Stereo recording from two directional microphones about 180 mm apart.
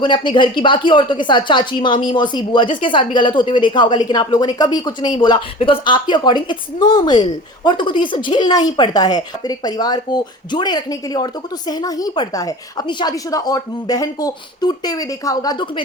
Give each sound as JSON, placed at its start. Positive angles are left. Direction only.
{"t": 0.0, "sound": "speech", "side_deg": 25}